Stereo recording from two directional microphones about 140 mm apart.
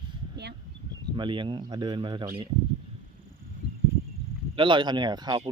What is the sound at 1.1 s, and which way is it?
Speech, 35° right (ahead or behind).